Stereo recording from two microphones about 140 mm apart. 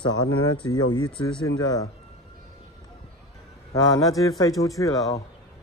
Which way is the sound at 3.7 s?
25° left (ahead or behind).